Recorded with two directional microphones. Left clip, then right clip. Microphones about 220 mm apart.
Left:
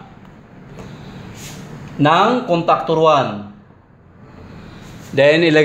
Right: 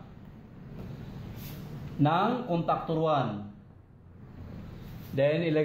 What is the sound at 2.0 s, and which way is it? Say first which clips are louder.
A man's voice: left 14 dB; 45° left (ahead or behind).